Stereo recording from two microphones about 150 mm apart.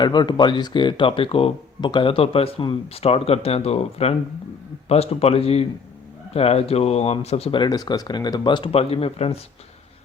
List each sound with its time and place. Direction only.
0.0 s a man's voice: 30° left (ahead or behind)